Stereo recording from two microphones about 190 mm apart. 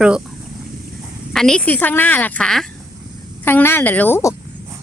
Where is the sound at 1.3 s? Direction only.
5° left (ahead or behind).